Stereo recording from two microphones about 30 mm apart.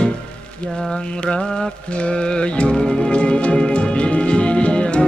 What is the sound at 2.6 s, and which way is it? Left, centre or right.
Music, left.